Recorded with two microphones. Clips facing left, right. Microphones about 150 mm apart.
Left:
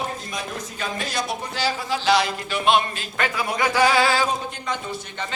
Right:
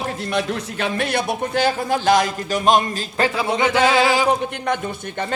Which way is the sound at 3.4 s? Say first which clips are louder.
Right 1 dB; 25° right (ahead or behind).